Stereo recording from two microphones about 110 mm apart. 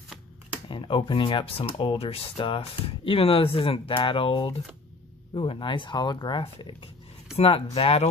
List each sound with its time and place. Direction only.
0.7 s speech: 50° left (ahead or behind)
2.3 s speech: 50° left (ahead or behind)
7.3 s speech: 60° left (ahead or behind)